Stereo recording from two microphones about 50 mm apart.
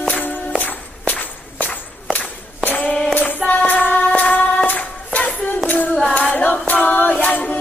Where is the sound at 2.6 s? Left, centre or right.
Left.